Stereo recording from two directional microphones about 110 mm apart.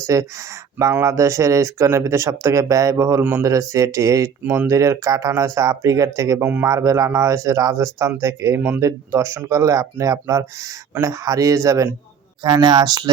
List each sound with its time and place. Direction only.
0.1 s speech: 30° right (ahead or behind)
6.4 s speech: 15° right (ahead or behind)
6.7 s a man's voice: 30° right (ahead or behind)